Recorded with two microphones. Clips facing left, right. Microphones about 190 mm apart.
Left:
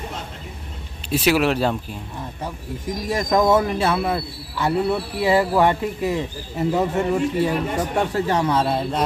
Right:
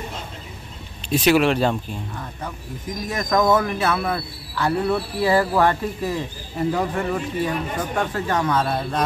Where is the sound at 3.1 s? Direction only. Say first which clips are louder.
Left 1 dB; 30° left (ahead or behind).